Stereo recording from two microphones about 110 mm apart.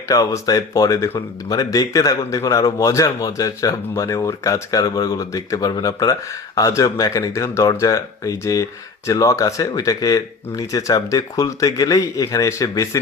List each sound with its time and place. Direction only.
0.1 s a man's voice: 35° left (ahead or behind)